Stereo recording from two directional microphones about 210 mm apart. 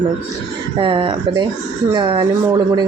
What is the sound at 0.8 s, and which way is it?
Speech, 25° right (ahead or behind).